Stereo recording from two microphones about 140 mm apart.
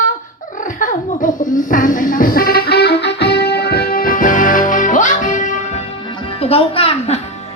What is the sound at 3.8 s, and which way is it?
Music, 90° left.